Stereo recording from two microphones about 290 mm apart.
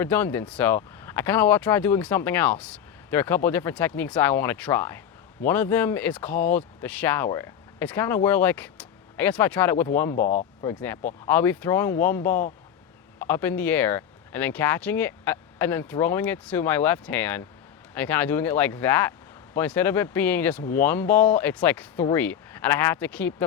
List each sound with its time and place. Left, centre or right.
0.0 s speech: centre
10.2 s speech: left
10.6 s speech: centre